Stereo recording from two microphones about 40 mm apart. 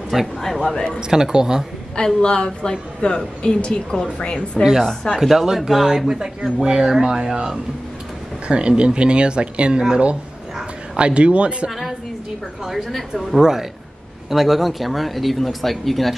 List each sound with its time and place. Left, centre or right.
0.1 s speech: centre
2.0 s a woman's voice: centre
5.1 s speech: centre; by 11.7 s right
12.6 s speech: centre